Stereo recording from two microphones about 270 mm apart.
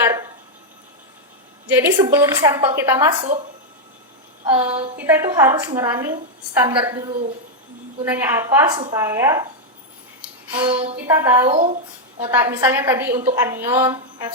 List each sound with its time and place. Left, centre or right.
1.7 s a woman's voice: centre
4.6 s a woman's voice: centre
10.5 s speech: centre
11.0 s a woman's voice: centre
12.3 s a woman's voice: centre